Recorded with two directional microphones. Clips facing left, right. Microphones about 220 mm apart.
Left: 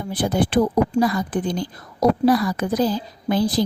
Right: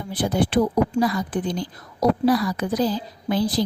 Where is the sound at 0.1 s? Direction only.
45° left (ahead or behind).